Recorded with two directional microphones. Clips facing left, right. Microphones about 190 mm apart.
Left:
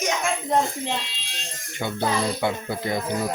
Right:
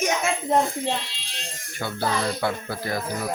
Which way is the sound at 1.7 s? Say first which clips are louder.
Left 2 dB; 20° left (ahead or behind).